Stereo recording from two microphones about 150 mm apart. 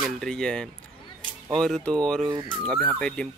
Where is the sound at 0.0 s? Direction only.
5° left (ahead or behind).